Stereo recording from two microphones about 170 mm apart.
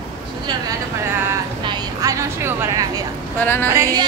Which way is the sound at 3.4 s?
10° left (ahead or behind).